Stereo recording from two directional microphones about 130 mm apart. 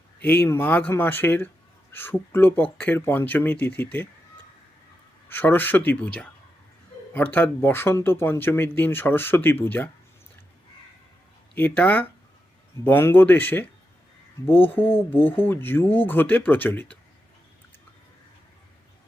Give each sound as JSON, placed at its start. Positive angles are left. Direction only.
{"t": 0.2, "sound": "speech", "side_deg": 15}
{"t": 5.3, "sound": "speech", "side_deg": 15}
{"t": 11.5, "sound": "speech", "side_deg": 15}